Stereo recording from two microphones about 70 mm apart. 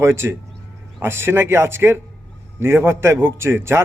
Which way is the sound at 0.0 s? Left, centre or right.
Right.